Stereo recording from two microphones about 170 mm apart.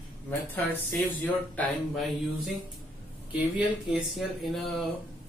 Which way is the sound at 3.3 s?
5° right (ahead or behind).